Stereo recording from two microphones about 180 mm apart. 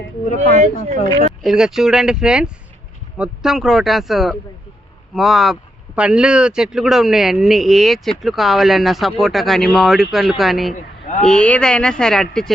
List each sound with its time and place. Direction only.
0.5 s speech: 45° right (ahead or behind)
1.4 s a man's voice: centre (ahead or behind)